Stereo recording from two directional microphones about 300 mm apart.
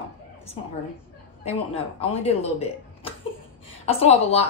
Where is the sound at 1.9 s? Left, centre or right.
Centre.